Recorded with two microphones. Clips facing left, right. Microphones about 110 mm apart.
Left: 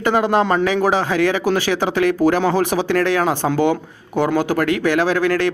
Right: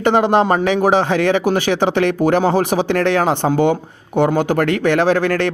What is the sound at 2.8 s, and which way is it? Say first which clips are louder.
Speech: right 1 dB; 60° right (ahead or behind).